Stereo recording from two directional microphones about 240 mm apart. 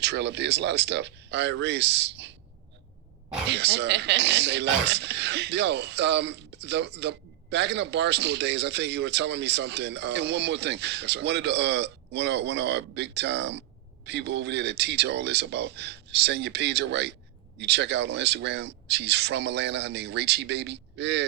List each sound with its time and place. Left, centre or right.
0.0 s speech: right
3.5 s speech: right